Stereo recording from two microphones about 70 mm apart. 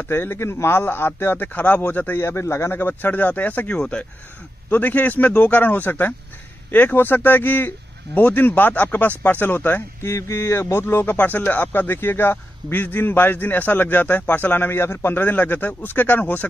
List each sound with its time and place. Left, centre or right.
0.0 s speech: left
2.2 s speech: left
10.0 s speech: left